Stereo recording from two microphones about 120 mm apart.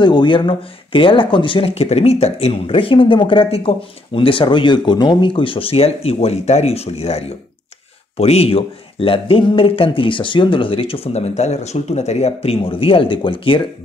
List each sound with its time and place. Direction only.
0.0 s speech: 40° left (ahead or behind)